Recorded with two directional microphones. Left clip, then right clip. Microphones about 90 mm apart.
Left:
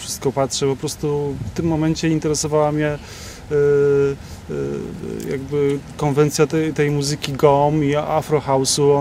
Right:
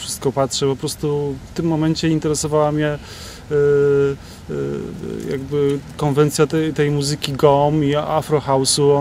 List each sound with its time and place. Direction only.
0.1 s speech: 20° right (ahead or behind)